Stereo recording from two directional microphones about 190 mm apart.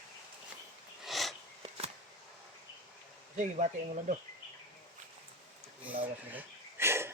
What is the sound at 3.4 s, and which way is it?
Speech, 40° right (ahead or behind).